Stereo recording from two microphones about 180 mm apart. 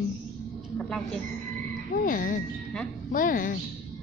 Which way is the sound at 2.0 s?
50° left (ahead or behind).